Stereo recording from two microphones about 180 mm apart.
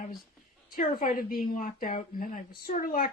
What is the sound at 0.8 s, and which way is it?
Speech, 50° left (ahead or behind).